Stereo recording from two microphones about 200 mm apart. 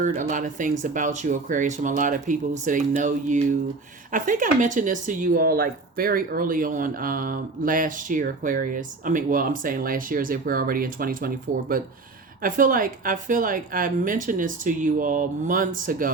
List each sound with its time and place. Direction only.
0.0 s a woman's voice: 40° right (ahead or behind)